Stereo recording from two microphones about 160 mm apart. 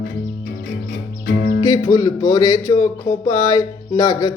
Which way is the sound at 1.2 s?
70° left (ahead or behind).